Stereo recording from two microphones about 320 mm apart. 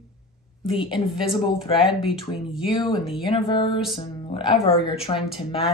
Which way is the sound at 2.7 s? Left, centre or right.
Centre.